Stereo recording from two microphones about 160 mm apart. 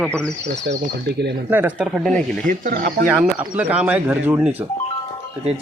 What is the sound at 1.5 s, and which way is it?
Speech, 10° right (ahead or behind).